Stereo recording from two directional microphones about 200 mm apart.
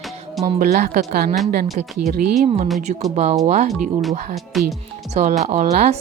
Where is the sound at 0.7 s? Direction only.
50° right (ahead or behind).